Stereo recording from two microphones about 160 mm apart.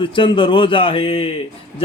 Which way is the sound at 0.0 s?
30° left (ahead or behind).